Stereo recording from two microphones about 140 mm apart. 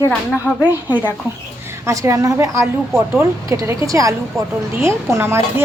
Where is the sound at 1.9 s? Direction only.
25° right (ahead or behind).